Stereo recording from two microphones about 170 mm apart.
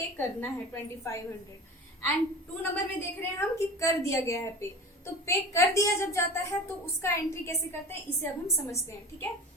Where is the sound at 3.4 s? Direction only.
15° left (ahead or behind).